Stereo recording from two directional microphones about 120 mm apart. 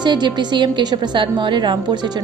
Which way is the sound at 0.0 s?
40° right (ahead or behind).